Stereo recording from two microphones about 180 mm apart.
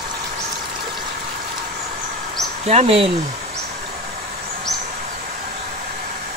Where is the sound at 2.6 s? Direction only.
35° right (ahead or behind).